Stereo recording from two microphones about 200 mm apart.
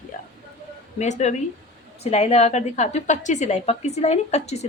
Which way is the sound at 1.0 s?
35° left (ahead or behind).